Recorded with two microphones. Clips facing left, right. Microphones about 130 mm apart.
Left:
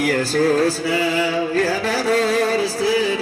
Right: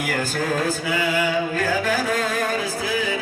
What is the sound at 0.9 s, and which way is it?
Music, 35° left (ahead or behind).